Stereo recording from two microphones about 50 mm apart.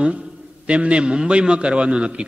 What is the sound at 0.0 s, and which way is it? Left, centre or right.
A man's voice, right.